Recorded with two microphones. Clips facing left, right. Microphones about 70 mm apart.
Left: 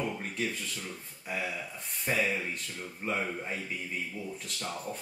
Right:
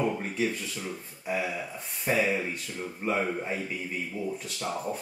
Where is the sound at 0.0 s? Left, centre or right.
Centre.